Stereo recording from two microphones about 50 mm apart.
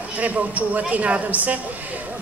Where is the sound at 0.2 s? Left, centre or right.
Right.